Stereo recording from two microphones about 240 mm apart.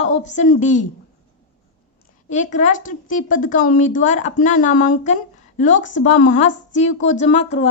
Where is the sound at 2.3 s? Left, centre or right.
Left.